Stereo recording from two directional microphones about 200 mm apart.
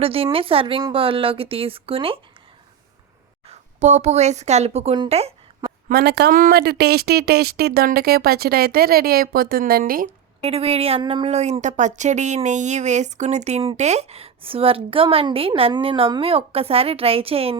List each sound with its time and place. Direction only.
0.0 s speech: 30° right (ahead or behind)
3.4 s a woman's voice: 35° right (ahead or behind)
5.9 s speech: 50° right (ahead or behind)
10.4 s speech: 30° right (ahead or behind)